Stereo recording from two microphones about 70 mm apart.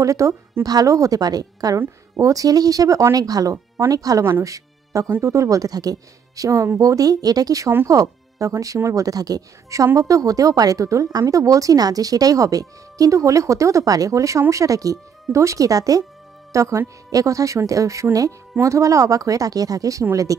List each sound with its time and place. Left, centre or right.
0.0 s a woman's voice: right
3.5 s music: right
3.9 s a woman's voice: right
4.2 s a woman's voice: right